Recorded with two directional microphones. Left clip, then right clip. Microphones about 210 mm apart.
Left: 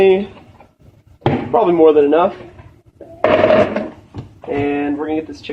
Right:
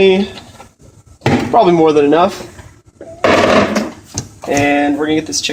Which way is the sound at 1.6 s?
55° right (ahead or behind).